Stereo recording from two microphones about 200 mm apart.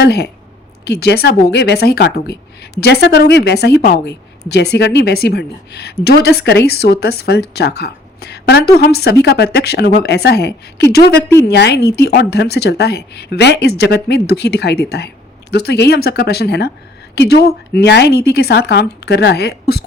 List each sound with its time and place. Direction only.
0.0 s a woman's voice: 55° left (ahead or behind)